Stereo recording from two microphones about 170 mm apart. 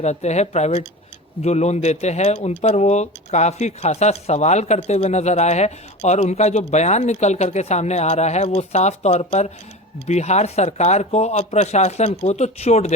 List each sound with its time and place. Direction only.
0.0 s speech: 40° left (ahead or behind)